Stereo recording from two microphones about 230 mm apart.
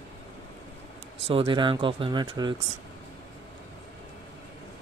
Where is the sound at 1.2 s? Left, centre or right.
Right.